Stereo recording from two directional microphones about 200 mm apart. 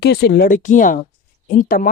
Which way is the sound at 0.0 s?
55° left (ahead or behind).